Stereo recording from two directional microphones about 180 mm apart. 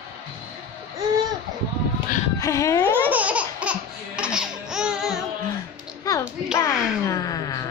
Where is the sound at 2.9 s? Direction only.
10° right (ahead or behind).